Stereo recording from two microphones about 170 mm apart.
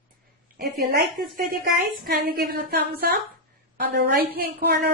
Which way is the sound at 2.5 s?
65° right (ahead or behind).